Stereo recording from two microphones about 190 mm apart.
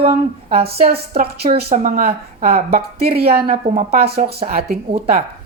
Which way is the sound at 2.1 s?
35° right (ahead or behind).